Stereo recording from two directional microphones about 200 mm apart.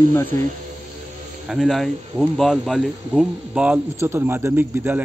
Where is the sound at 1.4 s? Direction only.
Centre (ahead or behind).